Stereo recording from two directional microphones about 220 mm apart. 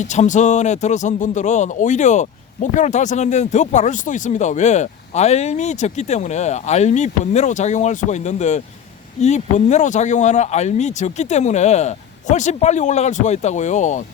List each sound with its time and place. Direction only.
0.0 s speech: 35° left (ahead or behind)